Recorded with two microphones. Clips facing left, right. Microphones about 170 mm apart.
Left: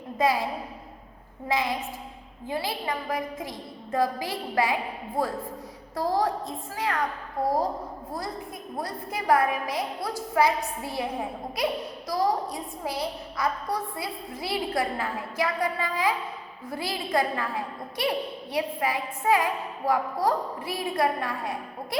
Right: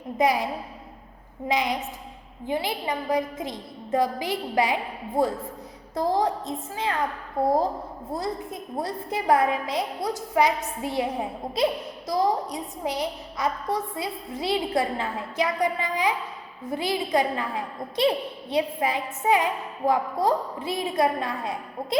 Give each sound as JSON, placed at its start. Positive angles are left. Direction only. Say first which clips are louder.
{"t": 0.2, "sound": "a woman's voice", "louder": "right 2 dB", "side_deg": -20}
{"t": 1.5, "sound": "a woman's voice", "louder": "right 2 dB", "side_deg": -20}
{"t": 8.8, "sound": "a woman's voice", "louder": "right 4 dB", "side_deg": -25}